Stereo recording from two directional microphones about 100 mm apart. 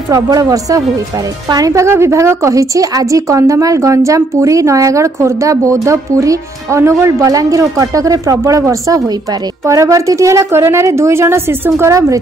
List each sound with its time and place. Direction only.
0.1 s a woman's voice: 35° right (ahead or behind)